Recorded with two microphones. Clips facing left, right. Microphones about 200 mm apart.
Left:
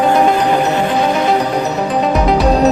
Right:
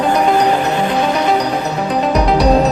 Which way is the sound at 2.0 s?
Centre (ahead or behind).